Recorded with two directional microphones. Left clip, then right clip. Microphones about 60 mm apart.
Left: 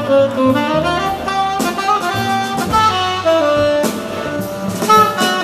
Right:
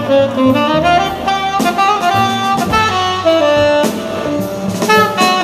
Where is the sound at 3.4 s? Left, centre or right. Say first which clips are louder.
Right 3 dB; right.